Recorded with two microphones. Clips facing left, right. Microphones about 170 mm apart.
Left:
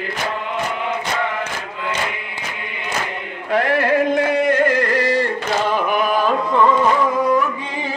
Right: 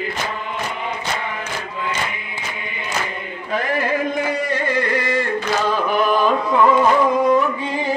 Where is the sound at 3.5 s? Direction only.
70° left (ahead or behind); by 5.3 s 40° left (ahead or behind).